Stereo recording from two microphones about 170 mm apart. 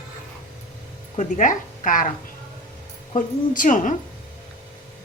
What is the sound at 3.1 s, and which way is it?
Speech, 50° left (ahead or behind).